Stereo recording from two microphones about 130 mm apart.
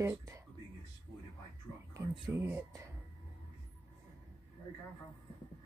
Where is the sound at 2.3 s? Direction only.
20° right (ahead or behind).